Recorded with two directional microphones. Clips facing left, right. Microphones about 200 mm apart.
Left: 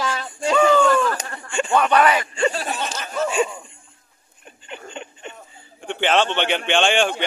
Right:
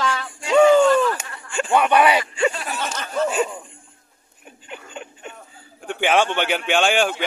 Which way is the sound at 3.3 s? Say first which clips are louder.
Left 1 dB; 5° right (ahead or behind).